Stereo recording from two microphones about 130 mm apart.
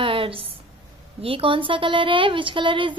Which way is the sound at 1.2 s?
45° right (ahead or behind).